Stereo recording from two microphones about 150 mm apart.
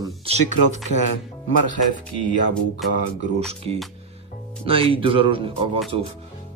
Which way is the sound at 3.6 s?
40° right (ahead or behind).